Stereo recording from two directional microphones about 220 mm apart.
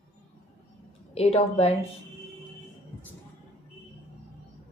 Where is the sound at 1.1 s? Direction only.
30° left (ahead or behind).